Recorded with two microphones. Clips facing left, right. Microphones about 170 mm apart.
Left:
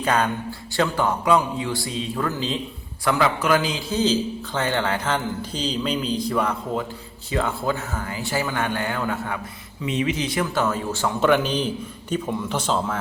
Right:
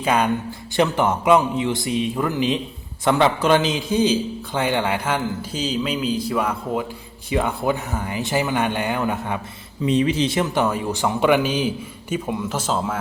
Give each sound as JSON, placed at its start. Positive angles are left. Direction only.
{"t": 0.0, "sound": "a man's voice", "side_deg": -10}
{"t": 9.8, "sound": "a man's voice", "side_deg": -35}